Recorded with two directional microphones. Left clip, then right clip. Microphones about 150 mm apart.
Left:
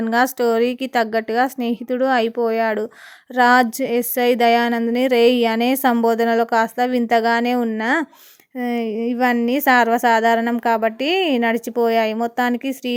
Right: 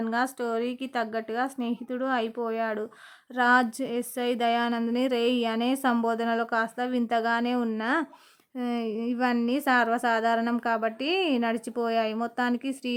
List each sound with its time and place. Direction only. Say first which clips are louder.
0.0 s a woman's voice: left 11 dB; 35° left (ahead or behind)